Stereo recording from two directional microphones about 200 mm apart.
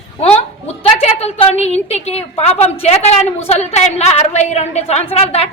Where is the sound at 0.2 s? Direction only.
30° left (ahead or behind).